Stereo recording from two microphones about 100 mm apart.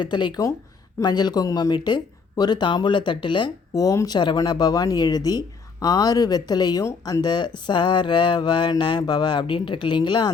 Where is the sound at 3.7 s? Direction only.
35° left (ahead or behind).